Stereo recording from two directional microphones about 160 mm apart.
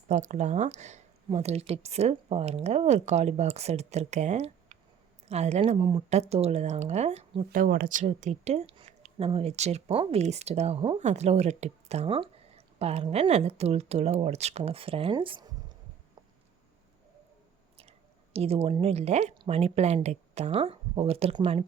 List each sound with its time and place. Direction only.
0.1 s speech: 45° right (ahead or behind)
7.5 s speech: 60° right (ahead or behind); by 15.5 s 30° right (ahead or behind)
18.3 s speech: 35° right (ahead or behind)